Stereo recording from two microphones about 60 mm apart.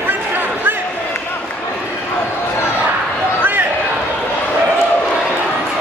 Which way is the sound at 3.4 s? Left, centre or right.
Right.